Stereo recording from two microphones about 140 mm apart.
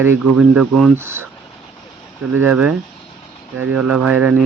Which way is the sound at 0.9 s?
15° right (ahead or behind).